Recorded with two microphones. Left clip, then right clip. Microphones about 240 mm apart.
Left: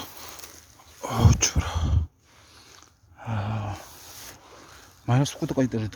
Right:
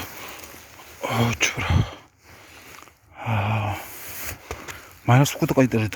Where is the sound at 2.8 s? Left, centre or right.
Centre.